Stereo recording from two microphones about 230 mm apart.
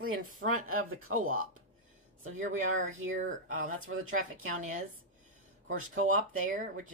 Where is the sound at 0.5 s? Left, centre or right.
Right.